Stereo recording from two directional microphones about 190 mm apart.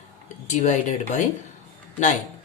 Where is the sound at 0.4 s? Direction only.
40° left (ahead or behind).